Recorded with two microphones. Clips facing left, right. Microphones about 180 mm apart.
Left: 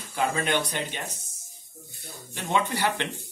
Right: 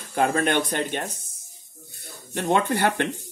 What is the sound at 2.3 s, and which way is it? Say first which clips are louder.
Speech: right 5 dB; 45° right (ahead or behind).